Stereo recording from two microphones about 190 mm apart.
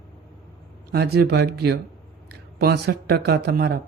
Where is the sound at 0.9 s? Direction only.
60° right (ahead or behind).